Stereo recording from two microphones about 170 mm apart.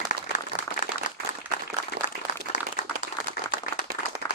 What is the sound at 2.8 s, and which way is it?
Clapping, 45° left (ahead or behind).